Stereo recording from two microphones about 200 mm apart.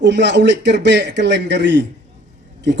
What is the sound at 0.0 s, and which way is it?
A man's voice, 60° right (ahead or behind).